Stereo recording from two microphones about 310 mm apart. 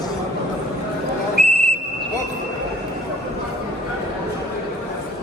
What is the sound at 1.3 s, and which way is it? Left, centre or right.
Whistle, left.